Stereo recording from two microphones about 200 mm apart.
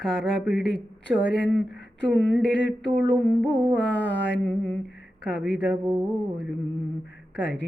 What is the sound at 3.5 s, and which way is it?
Carnatic music, 15° right (ahead or behind).